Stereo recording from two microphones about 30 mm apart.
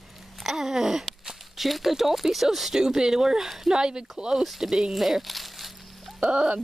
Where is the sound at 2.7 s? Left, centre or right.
Right.